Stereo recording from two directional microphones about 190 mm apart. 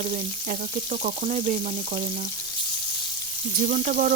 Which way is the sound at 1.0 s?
40° right (ahead or behind).